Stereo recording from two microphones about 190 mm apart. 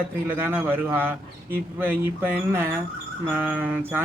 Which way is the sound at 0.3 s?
10° right (ahead or behind).